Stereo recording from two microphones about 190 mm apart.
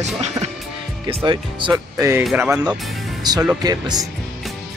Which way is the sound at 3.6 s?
20° right (ahead or behind).